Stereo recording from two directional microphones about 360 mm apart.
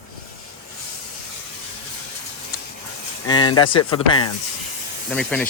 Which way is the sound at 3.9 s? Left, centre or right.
Centre.